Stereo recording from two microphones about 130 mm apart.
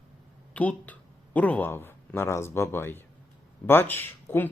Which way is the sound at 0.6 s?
10° left (ahead or behind).